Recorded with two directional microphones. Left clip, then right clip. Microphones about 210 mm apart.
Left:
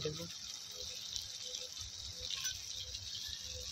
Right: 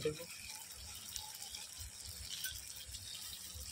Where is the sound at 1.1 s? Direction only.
15° right (ahead or behind).